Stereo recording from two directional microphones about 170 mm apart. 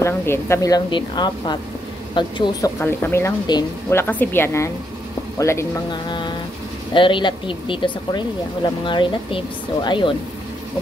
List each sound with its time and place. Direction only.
0.0 s a woman's voice: 15° left (ahead or behind)
2.8 s speech: 15° left (ahead or behind)
6.0 s a sound: 25° left (ahead or behind)
6.9 s a woman's voice: 30° left (ahead or behind)